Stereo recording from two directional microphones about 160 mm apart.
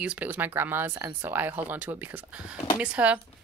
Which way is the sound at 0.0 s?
10° right (ahead or behind).